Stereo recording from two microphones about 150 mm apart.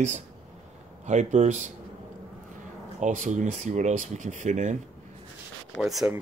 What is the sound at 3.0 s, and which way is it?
Speech, 55° right (ahead or behind).